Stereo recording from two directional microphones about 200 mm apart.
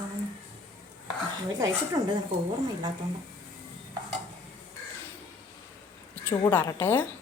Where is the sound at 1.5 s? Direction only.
15° right (ahead or behind).